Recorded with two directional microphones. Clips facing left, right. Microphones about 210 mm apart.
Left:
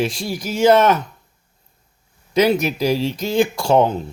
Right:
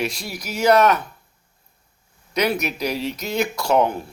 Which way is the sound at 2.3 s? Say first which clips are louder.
Left 6 dB; 25° left (ahead or behind).